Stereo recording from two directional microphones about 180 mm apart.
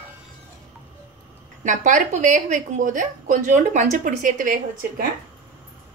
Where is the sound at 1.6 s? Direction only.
45° right (ahead or behind).